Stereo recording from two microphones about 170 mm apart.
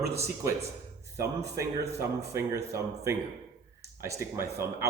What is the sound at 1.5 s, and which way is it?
Speech, 15° right (ahead or behind).